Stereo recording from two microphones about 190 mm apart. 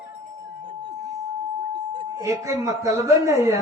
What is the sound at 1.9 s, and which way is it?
Speech, 15° right (ahead or behind).